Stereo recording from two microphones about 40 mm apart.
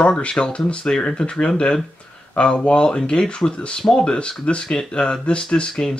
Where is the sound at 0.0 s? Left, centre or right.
Left.